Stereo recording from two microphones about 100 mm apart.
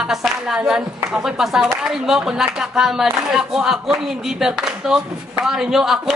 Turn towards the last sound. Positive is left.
turn(degrees=-5)  # may be behind; listen again after turning